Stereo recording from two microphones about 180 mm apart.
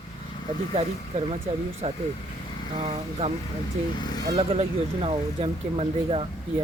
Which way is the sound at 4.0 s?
25° left (ahead or behind).